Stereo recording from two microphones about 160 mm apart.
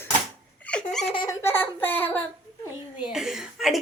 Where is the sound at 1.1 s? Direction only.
25° left (ahead or behind).